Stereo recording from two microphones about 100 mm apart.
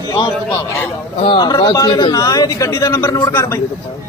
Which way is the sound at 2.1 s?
35° left (ahead or behind).